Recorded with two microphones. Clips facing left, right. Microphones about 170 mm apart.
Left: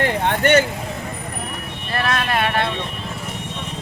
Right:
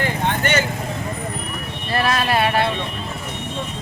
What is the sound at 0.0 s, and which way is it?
Vehicle, 60° left (ahead or behind).